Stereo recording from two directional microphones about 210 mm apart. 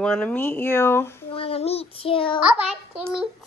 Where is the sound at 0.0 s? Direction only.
5° left (ahead or behind).